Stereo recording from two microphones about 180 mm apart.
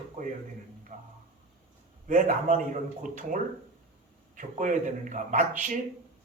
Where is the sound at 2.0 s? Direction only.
50° right (ahead or behind).